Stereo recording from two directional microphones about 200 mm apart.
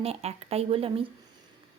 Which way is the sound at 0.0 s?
30° right (ahead or behind).